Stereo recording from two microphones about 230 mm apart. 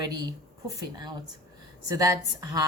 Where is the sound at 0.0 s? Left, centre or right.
Centre.